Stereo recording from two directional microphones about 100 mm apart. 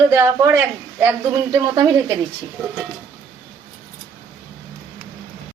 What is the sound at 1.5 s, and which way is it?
Speech, 45° right (ahead or behind).